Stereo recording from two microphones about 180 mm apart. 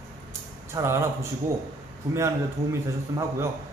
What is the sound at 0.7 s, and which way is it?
A man's voice, 15° right (ahead or behind).